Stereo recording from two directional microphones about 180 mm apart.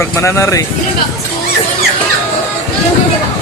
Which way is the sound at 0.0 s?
15° left (ahead or behind).